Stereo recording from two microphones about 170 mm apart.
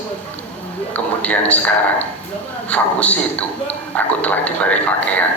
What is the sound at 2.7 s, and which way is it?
A woman's voice, 10° left (ahead or behind).